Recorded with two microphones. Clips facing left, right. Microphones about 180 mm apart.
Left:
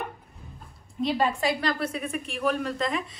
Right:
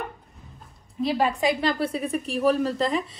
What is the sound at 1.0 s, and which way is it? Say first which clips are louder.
A woman's voice: right 2 dB; 5° right (ahead or behind).